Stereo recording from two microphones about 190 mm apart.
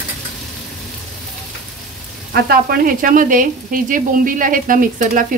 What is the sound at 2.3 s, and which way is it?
Frying, 55° right (ahead or behind).